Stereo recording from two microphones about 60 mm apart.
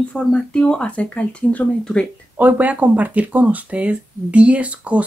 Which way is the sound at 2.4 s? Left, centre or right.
Right.